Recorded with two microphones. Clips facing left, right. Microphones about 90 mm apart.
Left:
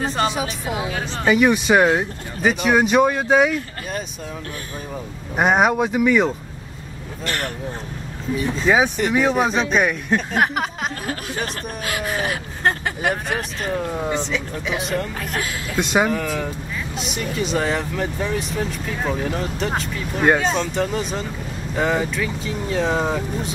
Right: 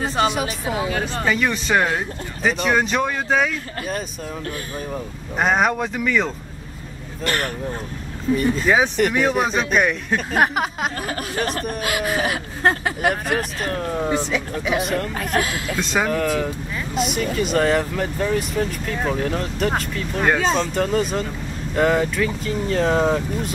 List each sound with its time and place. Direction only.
0.0 s speech: centre (ahead or behind)
5.3 s speech: 5° left (ahead or behind)
8.4 s speech: centre (ahead or behind)
15.3 s a woman's voice: 60° right (ahead or behind)
15.7 s speech: 5° left (ahead or behind)